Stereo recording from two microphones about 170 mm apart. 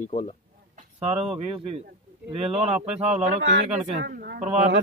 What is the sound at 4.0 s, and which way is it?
Speech, 75° right (ahead or behind).